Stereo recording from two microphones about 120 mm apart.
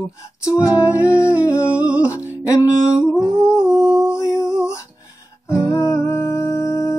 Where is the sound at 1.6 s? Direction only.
10° right (ahead or behind).